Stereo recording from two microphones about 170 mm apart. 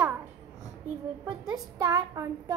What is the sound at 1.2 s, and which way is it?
A woman's voice, 20° right (ahead or behind).